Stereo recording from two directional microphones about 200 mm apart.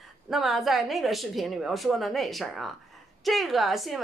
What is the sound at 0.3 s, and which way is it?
A woman's voice, centre (ahead or behind).